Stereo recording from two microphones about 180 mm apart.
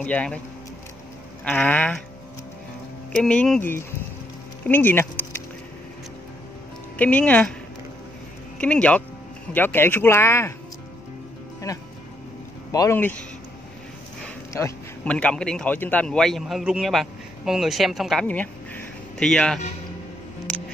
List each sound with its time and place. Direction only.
0.0 s speech: 5° left (ahead or behind)
1.4 s speech: 10° left (ahead or behind)
3.2 s speech: 5° left (ahead or behind)
7.0 s speech: 5° left (ahead or behind)
8.5 s speech: 5° left (ahead or behind)
11.7 s speech: 20° left (ahead or behind)
14.5 s speech: 10° left (ahead or behind)